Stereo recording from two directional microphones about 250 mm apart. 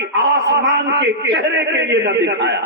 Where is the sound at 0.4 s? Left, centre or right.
Right.